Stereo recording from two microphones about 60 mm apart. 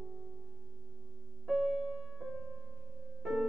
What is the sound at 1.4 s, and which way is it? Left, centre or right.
Music, centre.